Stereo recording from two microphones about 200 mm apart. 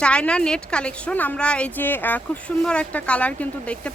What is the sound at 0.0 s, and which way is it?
A woman's voice, 5° left (ahead or behind).